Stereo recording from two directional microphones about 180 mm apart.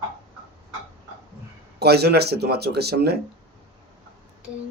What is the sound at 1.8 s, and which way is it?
Speech, 65° right (ahead or behind).